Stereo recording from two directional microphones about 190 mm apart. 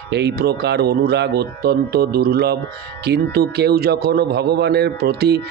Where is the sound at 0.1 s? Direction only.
60° right (ahead or behind).